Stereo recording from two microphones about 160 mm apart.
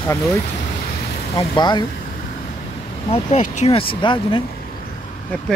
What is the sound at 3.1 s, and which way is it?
Speech, 45° left (ahead or behind).